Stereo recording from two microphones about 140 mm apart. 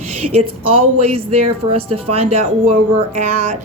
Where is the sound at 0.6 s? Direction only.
40° right (ahead or behind).